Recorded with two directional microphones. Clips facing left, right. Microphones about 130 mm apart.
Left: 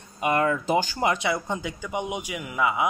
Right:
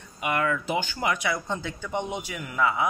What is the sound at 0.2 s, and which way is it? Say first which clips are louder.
Speech: left 3 dB; 35° left (ahead or behind).